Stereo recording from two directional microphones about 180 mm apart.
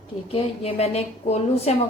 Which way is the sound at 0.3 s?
35° left (ahead or behind).